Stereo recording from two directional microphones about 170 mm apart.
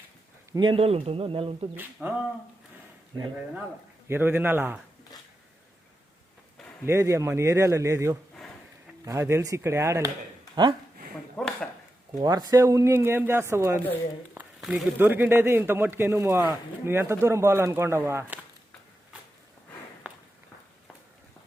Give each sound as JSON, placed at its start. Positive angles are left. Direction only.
{"t": 0.5, "sound": "speech", "side_deg": -30}
{"t": 1.7, "sound": "a man's voice", "side_deg": -10}
{"t": 4.1, "sound": "a man's voice", "side_deg": -10}
{"t": 6.8, "sound": "a man's voice", "side_deg": -15}
{"t": 10.5, "sound": "speech", "side_deg": -25}
{"t": 11.1, "sound": "speech", "side_deg": 5}
{"t": 12.1, "sound": "a man's voice", "side_deg": -20}
{"t": 14.6, "sound": "speech", "side_deg": 0}
{"t": 14.9, "sound": "a man's voice", "side_deg": -10}